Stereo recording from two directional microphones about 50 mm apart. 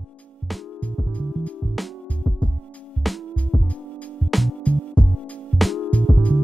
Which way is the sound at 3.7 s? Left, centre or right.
Left.